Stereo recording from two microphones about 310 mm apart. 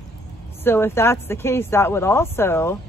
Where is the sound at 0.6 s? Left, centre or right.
Centre.